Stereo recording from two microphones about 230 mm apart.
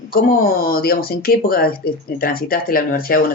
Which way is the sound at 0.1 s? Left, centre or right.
Left.